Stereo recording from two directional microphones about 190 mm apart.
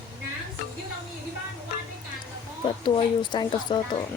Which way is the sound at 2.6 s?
25° left (ahead or behind).